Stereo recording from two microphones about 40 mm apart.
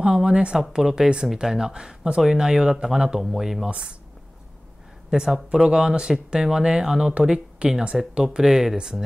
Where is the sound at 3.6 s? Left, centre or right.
Right.